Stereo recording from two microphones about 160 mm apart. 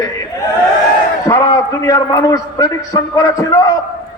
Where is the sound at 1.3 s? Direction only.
20° left (ahead or behind).